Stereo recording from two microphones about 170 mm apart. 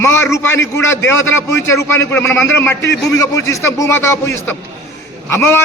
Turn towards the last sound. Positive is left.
turn(degrees=10)  # may be behind; listen again after turning